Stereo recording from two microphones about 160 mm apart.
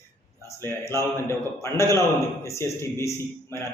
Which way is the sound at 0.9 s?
20° left (ahead or behind).